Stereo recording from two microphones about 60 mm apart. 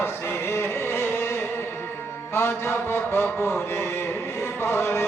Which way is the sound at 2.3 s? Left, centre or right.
Left.